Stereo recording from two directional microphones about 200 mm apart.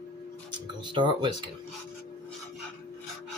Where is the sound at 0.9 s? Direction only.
25° right (ahead or behind).